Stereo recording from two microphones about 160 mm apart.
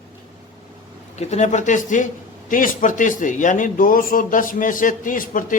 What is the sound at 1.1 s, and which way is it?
Speech, 45° left (ahead or behind).